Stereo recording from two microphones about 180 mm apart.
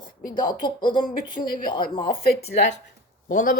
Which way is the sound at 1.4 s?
50° left (ahead or behind).